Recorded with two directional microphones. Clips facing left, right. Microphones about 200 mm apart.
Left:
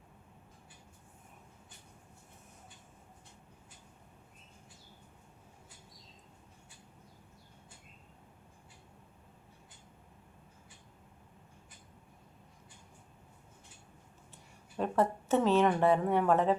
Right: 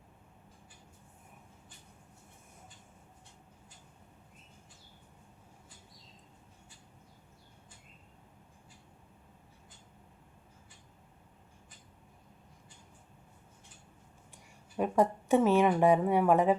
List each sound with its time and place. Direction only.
14.8 s a woman's voice: 10° right (ahead or behind)